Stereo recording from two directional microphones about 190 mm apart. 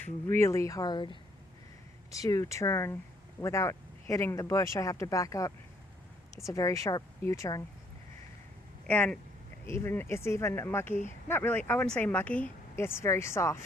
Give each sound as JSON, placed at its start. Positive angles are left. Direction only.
{"t": 0.0, "sound": "speech", "side_deg": 15}
{"t": 8.9, "sound": "speech", "side_deg": 5}